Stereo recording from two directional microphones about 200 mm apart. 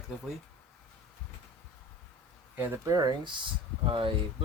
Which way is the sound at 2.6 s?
15° right (ahead or behind).